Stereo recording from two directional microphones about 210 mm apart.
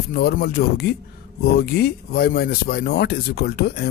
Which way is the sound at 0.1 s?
50° left (ahead or behind).